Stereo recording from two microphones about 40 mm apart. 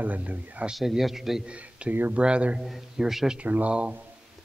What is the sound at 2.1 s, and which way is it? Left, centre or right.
Speech, right.